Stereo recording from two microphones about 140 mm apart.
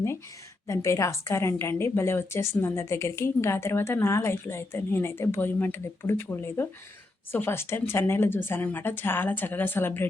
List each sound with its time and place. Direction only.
0.7 s a woman's voice: 20° left (ahead or behind)